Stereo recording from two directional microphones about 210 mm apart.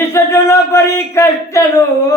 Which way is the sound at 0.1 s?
15° left (ahead or behind).